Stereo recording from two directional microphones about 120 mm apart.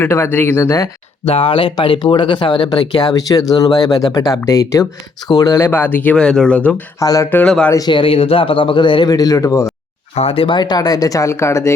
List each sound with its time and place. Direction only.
0.0 s speech: 20° left (ahead or behind)
1.2 s speech: 55° left (ahead or behind); by 5.5 s 30° left (ahead or behind)
5.5 s speech: 20° left (ahead or behind)
7.0 s speech: 30° left (ahead or behind)
7.3 s speech: 15° left (ahead or behind)
7.9 s speech: 45° left (ahead or behind)
9.1 s speech: 30° left (ahead or behind)
10.2 s speech: 50° left (ahead or behind); by 11.7 s 25° left (ahead or behind)